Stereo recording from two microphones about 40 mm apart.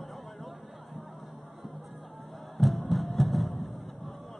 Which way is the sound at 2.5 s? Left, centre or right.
Centre.